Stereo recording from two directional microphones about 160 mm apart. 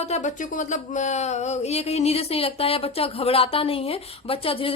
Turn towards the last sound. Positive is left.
turn(degrees=35)  # may be behind; listen again after turning